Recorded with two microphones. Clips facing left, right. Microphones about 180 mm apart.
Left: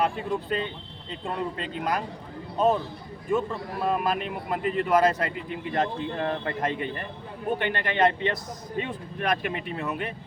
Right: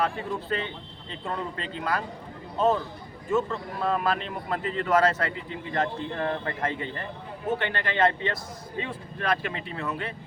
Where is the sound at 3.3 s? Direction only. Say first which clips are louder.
Even; 15° left (ahead or behind).